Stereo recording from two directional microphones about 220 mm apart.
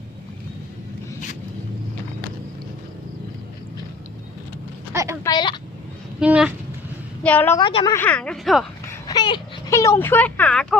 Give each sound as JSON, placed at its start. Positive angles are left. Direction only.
{"t": 5.2, "sound": "speech", "side_deg": 20}
{"t": 6.1, "sound": "speech", "side_deg": -5}
{"t": 7.2, "sound": "a woman's voice", "side_deg": 5}
{"t": 7.6, "sound": "speech", "side_deg": 25}
{"t": 7.9, "sound": "speech", "side_deg": 5}
{"t": 8.9, "sound": "speech", "side_deg": 15}